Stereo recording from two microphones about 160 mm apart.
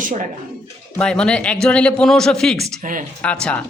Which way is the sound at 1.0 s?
5° left (ahead or behind).